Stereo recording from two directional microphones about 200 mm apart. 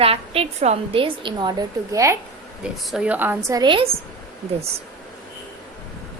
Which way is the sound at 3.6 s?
25° right (ahead or behind).